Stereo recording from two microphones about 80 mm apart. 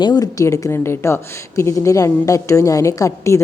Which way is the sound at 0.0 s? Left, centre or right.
Left.